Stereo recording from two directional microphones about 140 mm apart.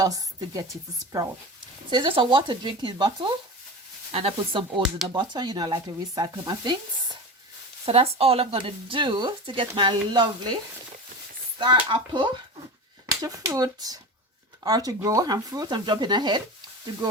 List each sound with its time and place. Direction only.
0.5 s speech: 25° right (ahead or behind)
1.9 s speech: 35° right (ahead or behind)
7.9 s speech: 45° right (ahead or behind)
11.5 s speech: 35° right (ahead or behind)